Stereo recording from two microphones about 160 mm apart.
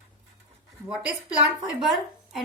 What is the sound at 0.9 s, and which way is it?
A woman's voice, 5° right (ahead or behind).